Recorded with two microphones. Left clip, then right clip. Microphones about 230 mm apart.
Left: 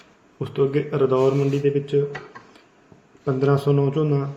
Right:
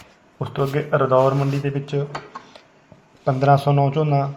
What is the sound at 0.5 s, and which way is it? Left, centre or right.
Speech, right.